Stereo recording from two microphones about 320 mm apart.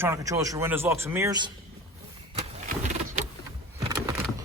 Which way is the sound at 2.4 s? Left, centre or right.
Right.